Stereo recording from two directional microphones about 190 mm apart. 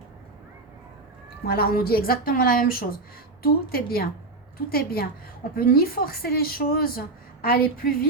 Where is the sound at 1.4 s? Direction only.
55° left (ahead or behind).